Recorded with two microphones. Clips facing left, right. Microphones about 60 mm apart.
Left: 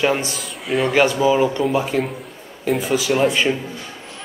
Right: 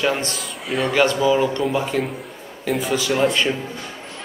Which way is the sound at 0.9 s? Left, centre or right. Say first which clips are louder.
Left 1 dB; centre.